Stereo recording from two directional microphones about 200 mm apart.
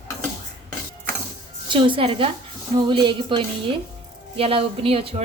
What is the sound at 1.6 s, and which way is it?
A woman's voice, 25° right (ahead or behind).